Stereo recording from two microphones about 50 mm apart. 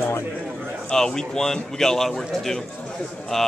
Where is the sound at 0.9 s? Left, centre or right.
Centre.